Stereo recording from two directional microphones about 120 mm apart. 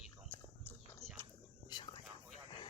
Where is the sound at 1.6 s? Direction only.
40° left (ahead or behind).